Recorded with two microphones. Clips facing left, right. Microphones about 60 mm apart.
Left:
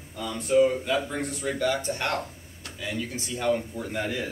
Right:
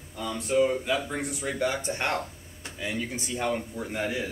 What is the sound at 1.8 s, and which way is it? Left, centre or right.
Speech, right.